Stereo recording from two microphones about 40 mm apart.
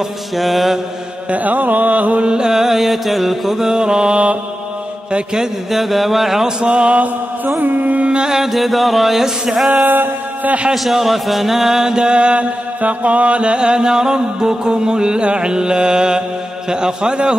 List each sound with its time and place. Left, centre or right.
0.4 s music: centre
1.3 s carnatic music: right
2.2 s chant: centre
3.7 s music: right
5.1 s music: centre
5.7 s music: centre
6.4 s music: right
7.4 s carnatic music: right
8.3 s music: centre
9.8 s mantra: right
10.7 s chant: centre; by 12.4 s right
12.8 s music: right